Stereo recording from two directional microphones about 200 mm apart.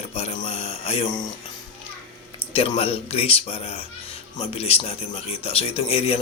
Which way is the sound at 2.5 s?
30° left (ahead or behind).